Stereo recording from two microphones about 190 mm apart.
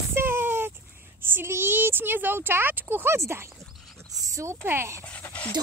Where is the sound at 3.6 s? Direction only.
Centre (ahead or behind).